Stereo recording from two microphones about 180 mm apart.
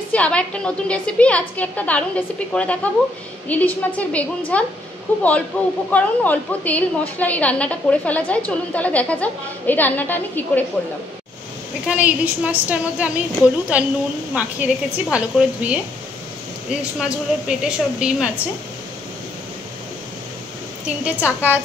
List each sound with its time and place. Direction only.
0.1 s a woman's voice: 5° left (ahead or behind)
11.9 s a woman's voice: 10° right (ahead or behind)
17.5 s a woman's voice: 5° right (ahead or behind)
20.8 s a woman's voice: 5° right (ahead or behind)